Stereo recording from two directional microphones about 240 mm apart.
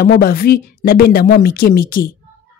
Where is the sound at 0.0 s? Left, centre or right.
Left.